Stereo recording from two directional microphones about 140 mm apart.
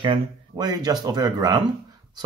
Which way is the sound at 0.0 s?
30° right (ahead or behind).